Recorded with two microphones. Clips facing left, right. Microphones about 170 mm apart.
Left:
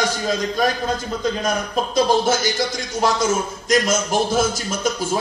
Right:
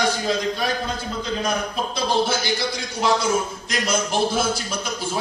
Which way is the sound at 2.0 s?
45° left (ahead or behind).